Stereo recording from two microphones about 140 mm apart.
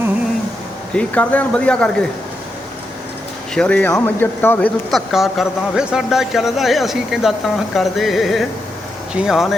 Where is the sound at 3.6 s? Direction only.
10° left (ahead or behind).